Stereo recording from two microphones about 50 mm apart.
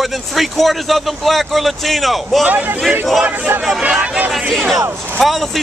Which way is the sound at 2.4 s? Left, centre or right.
Right.